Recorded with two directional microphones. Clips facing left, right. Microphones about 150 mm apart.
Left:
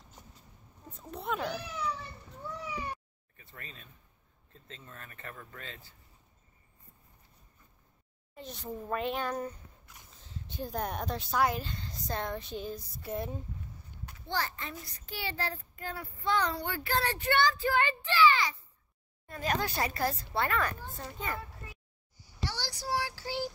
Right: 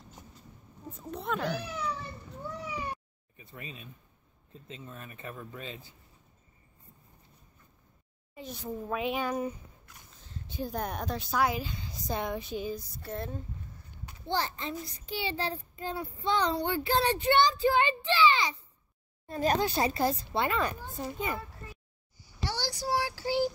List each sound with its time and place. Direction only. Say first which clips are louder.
1.0 s speech: right 2 dB; centre (ahead or behind)
3.3 s speech: right 5 dB; 15° right (ahead or behind)
8.4 s speech: right 3 dB; 5° right (ahead or behind)
13.0 s speech: left 4 dB; 10° left (ahead or behind)
14.1 s a child's voice: right 3 dB; 25° right (ahead or behind)
22.4 s child singing: right 4 dB; 10° right (ahead or behind)